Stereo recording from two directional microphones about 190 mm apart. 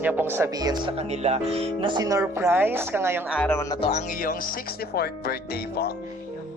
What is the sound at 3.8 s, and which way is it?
Speech, 35° left (ahead or behind).